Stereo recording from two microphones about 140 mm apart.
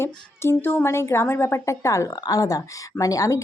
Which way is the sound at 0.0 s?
15° left (ahead or behind).